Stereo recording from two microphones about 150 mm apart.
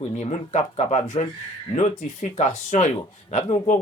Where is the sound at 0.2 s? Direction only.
50° left (ahead or behind).